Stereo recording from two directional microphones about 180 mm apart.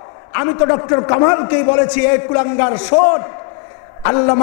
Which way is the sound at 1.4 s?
15° left (ahead or behind).